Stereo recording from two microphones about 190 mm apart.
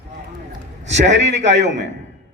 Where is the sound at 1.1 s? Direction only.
70° right (ahead or behind).